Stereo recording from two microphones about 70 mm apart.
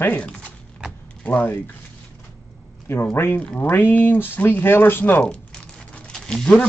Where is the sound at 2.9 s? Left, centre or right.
Left.